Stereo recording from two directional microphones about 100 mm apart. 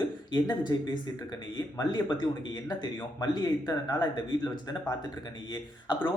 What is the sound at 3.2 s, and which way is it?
Speech, 40° left (ahead or behind).